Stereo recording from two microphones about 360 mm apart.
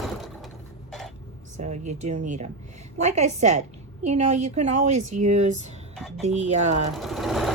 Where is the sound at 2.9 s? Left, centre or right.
Centre.